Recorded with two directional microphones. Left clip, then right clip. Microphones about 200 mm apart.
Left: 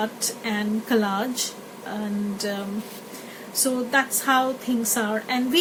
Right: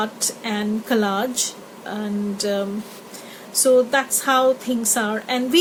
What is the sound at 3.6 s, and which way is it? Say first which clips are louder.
A woman's voice: right 7 dB; 55° right (ahead or behind).